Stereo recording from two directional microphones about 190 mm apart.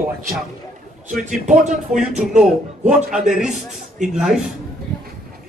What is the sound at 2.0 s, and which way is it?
A man's voice, 5° right (ahead or behind).